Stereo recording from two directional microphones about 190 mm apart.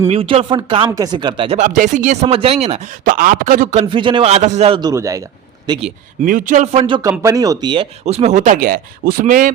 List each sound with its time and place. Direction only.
0.1 s speech: 30° right (ahead or behind)
1.5 s speech: 40° right (ahead or behind)
2.2 s speech: 30° right (ahead or behind)
3.0 s speech: 45° right (ahead or behind)
4.8 s speech: 20° right (ahead or behind)
6.2 s speech: 45° right (ahead or behind)
6.8 s speech: 20° right (ahead or behind); by 9.5 s 45° right (ahead or behind)